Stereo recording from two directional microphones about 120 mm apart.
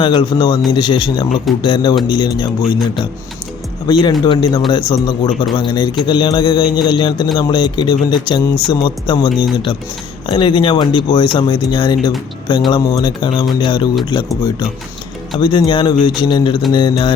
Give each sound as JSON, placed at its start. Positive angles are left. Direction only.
{"t": 0.0, "sound": "speech", "side_deg": 40}
{"t": 3.8, "sound": "speech", "side_deg": 35}
{"t": 15.4, "sound": "speech", "side_deg": 45}